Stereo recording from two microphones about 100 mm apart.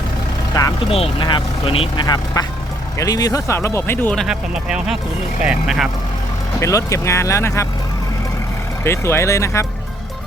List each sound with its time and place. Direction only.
0.9 s speech: 75° left (ahead or behind)
1.2 s speech: 60° left (ahead or behind)
2.0 s speech: 40° left (ahead or behind); by 4.1 s 20° left (ahead or behind)
4.1 s speech: centre (ahead or behind)
6.6 s speech: 30° left (ahead or behind)
8.8 s speech: 25° left (ahead or behind)